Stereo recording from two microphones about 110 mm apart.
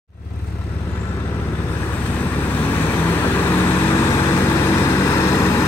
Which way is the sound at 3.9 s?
30° left (ahead or behind).